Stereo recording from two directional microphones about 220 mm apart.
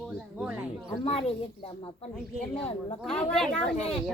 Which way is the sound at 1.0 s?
25° left (ahead or behind).